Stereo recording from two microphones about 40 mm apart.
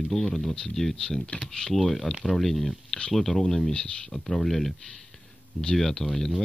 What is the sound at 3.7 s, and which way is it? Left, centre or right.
Speech, left.